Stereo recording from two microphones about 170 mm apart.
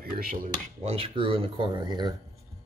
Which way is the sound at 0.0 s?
60° right (ahead or behind).